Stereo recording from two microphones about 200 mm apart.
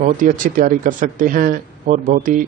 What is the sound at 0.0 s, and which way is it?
Speech, 40° right (ahead or behind).